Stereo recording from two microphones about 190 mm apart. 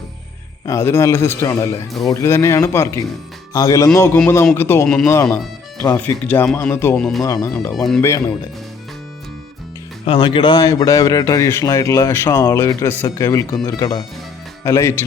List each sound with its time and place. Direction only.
0.6 s a man's voice: 15° left (ahead or behind)
1.9 s speech: centre (ahead or behind)
2.2 s a man's voice: 15° left (ahead or behind)
8.0 s a man's voice: 15° left (ahead or behind)
10.1 s a man's voice: 25° left (ahead or behind)